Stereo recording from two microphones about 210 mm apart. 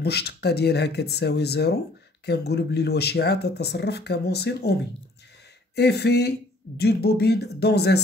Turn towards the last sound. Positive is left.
turn(degrees=50)  # may be behind; listen again after turning